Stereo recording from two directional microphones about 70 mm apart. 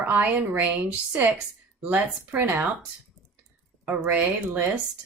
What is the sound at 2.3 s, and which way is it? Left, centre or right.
Speech, right.